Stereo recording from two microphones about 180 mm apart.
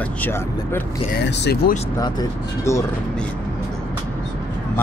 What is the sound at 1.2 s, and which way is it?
Speech, 70° left (ahead or behind).